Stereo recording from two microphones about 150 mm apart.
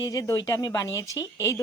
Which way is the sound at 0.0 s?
25° left (ahead or behind).